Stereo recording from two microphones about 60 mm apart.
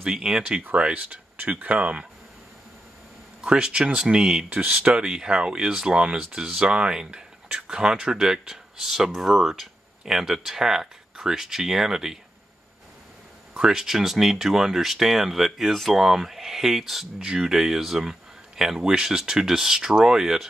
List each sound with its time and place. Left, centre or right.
0.0 s speech: centre
0.7 s speech: right
1.7 s speech: centre
3.3 s speech: centre
4.5 s speech: right; by 12.2 s centre
13.6 s speech: centre